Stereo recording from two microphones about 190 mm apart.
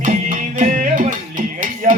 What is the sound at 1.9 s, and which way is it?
Music, 35° right (ahead or behind).